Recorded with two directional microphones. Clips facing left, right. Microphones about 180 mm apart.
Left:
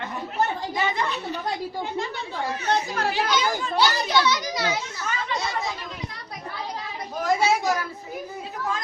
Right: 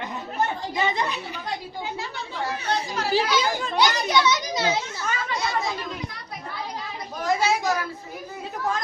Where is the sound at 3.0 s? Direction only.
55° left (ahead or behind).